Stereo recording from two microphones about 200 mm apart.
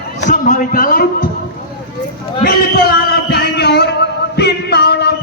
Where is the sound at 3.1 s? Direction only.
55° left (ahead or behind).